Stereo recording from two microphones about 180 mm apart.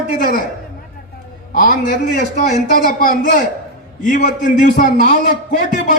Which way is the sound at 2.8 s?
50° left (ahead or behind).